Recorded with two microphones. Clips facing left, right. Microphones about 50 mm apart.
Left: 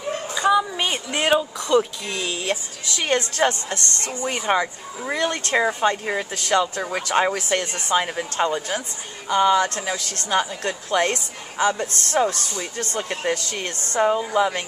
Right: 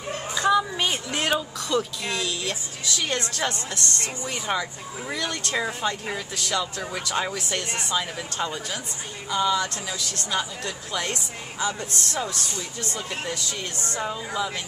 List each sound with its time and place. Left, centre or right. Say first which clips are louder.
0.3 s speech: left 2 dB; centre; by 14.6 s left